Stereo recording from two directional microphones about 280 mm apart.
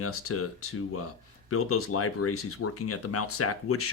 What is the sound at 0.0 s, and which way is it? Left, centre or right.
Speech, left.